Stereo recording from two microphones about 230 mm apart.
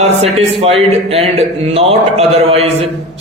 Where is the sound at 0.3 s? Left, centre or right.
Right.